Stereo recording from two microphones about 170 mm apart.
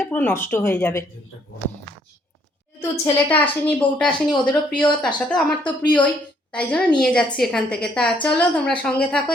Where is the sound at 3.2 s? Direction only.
10° left (ahead or behind).